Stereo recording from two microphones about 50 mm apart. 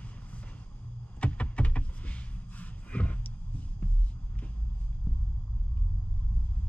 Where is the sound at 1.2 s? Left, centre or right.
Left.